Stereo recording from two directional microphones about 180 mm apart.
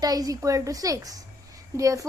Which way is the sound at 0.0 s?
20° right (ahead or behind).